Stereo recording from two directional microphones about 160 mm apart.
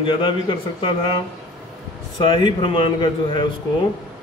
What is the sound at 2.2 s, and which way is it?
Speech, 35° left (ahead or behind).